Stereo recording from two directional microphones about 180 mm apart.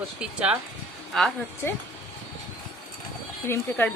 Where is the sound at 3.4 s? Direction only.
15° left (ahead or behind).